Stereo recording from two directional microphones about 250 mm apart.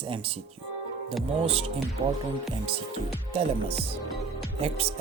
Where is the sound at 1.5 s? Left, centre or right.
Right.